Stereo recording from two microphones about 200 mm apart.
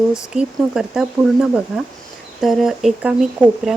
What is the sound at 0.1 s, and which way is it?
Speech, 5° right (ahead or behind).